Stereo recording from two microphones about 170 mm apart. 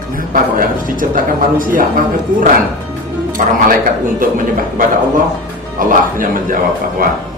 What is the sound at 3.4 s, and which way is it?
Speech, 50° right (ahead or behind).